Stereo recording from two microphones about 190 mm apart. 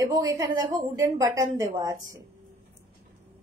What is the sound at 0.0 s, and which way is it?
A woman's voice, 20° right (ahead or behind).